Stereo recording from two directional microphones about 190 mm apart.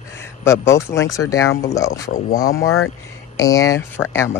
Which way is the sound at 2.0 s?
45° left (ahead or behind).